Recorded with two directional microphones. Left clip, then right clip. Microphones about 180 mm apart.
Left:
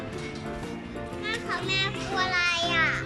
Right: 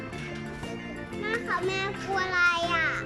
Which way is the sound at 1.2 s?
40° right (ahead or behind).